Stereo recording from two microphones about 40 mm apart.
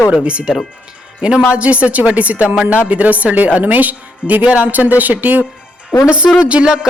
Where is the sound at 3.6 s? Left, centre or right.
Right.